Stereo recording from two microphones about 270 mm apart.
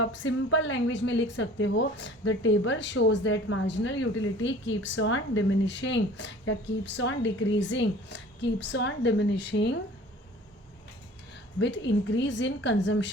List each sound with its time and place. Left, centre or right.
0.0 s a woman's voice: left
11.6 s a woman's voice: left